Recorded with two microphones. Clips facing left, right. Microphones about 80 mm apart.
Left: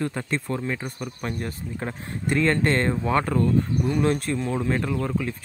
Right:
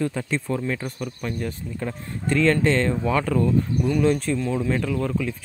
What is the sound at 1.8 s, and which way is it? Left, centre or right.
Speech, left.